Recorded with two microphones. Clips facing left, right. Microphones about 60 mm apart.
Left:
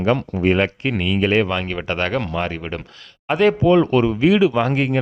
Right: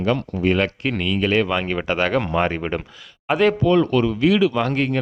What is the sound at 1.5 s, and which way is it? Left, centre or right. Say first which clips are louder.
Speech: right 1 dB; centre.